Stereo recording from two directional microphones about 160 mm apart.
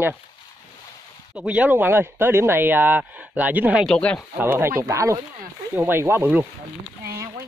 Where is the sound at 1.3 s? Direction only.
10° right (ahead or behind).